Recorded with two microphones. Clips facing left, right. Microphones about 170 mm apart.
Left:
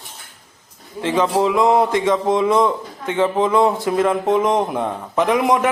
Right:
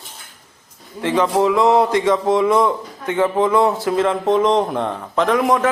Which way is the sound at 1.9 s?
25° left (ahead or behind).